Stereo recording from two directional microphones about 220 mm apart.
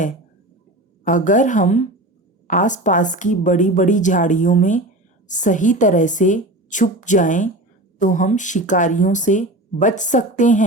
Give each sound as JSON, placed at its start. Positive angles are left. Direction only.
{"t": 1.0, "sound": "speech", "side_deg": 35}